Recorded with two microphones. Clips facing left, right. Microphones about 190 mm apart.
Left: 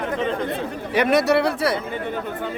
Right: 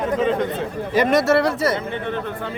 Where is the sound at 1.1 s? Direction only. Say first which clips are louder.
Even; centre (ahead or behind).